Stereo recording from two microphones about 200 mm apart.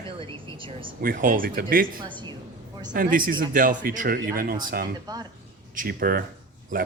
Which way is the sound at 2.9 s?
45° right (ahead or behind).